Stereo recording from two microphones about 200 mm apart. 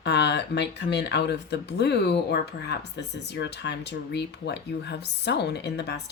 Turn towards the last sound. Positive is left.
turn(degrees=55)  # may be behind; listen again after turning